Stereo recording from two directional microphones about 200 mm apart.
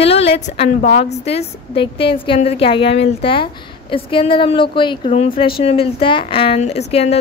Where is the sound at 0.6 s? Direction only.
35° left (ahead or behind).